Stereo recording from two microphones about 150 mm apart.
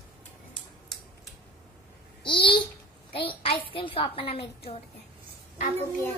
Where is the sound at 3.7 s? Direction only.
35° left (ahead or behind).